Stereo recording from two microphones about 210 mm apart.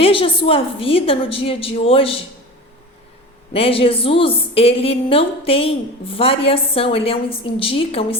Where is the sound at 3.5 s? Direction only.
25° left (ahead or behind).